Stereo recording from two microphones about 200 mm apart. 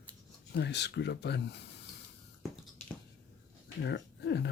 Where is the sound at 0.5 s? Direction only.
55° left (ahead or behind).